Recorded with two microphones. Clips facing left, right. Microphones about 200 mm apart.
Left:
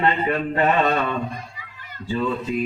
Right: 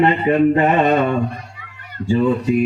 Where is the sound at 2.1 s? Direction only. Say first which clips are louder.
Right 8 dB; 15° right (ahead or behind).